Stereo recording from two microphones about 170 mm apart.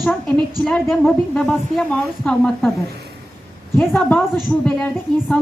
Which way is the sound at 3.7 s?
5° left (ahead or behind).